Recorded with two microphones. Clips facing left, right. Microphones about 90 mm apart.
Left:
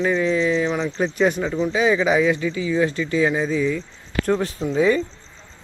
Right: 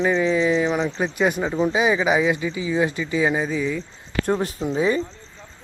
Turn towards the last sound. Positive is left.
turn(degrees=-20)  # may be behind; listen again after turning